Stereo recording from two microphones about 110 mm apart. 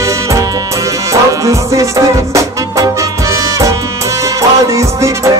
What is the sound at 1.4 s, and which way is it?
Music, 30° right (ahead or behind).